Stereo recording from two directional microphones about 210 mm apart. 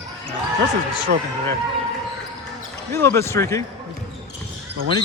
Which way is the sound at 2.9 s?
10° left (ahead or behind).